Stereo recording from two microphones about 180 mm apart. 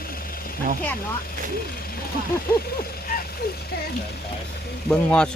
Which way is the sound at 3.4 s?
60° left (ahead or behind).